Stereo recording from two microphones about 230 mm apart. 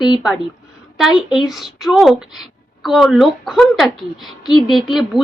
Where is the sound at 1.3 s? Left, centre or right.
Centre.